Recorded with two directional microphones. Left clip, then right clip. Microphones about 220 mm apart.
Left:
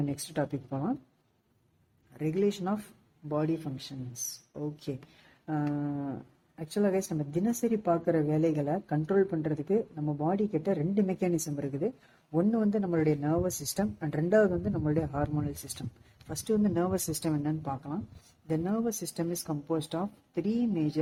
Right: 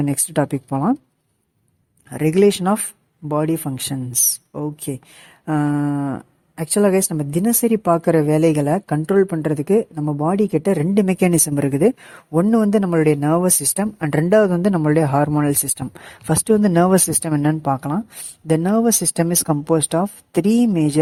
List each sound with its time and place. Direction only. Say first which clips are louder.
0.0 s speech: right 13 dB; 45° right (ahead or behind)
2.1 s speech: right 15 dB; 45° right (ahead or behind)
5.5 s speech: right 13 dB; 50° right (ahead or behind)